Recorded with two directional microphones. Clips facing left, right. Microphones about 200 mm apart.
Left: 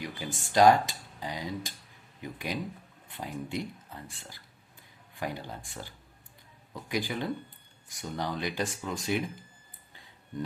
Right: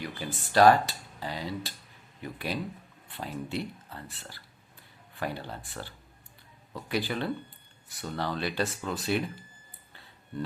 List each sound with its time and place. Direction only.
0.0 s a sound: 15° left (ahead or behind)
0.5 s speech: 15° left (ahead or behind)
9.9 s music: 15° left (ahead or behind)